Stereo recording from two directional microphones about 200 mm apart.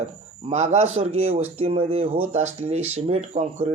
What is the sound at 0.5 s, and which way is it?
Speech, 35° right (ahead or behind).